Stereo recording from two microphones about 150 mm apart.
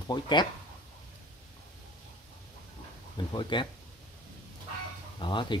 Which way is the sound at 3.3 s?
30° left (ahead or behind).